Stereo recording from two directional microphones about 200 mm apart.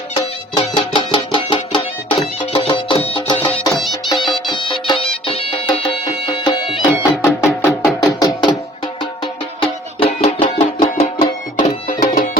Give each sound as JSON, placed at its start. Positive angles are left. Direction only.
{"t": 0.1, "sound": "music", "side_deg": 25}
{"t": 7.3, "sound": "music", "side_deg": 5}
{"t": 8.2, "sound": "music", "side_deg": 20}
{"t": 11.5, "sound": "music", "side_deg": 45}